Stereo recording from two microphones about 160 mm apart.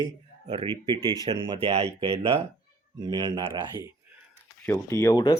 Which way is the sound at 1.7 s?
40° right (ahead or behind).